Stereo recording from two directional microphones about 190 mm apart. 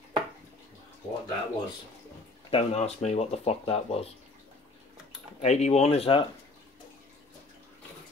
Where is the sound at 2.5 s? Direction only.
35° left (ahead or behind).